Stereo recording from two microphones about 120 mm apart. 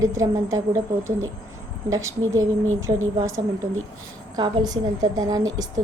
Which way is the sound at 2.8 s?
25° right (ahead or behind).